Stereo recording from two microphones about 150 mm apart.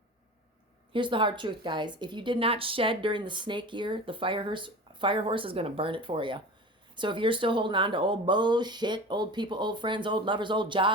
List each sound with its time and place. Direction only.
0.9 s speech: 35° right (ahead or behind)